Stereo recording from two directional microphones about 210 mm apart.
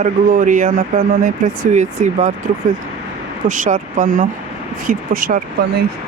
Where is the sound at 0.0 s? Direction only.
40° right (ahead or behind).